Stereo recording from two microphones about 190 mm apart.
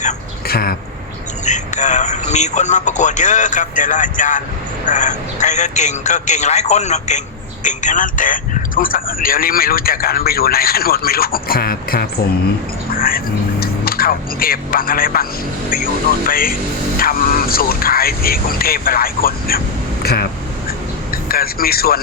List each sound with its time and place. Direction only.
0.0 s a sound: 50° left (ahead or behind)
1.5 s a man's voice: 40° left (ahead or behind)
21.2 s speech: 50° left (ahead or behind)